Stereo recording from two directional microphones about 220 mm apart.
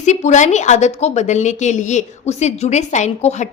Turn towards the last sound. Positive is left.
turn(degrees=30)  # may be behind; listen again after turning